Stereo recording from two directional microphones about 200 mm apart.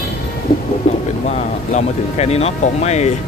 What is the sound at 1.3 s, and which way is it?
Speech, 35° left (ahead or behind).